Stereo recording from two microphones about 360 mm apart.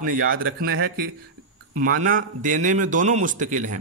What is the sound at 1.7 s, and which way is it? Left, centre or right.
A man's voice, right.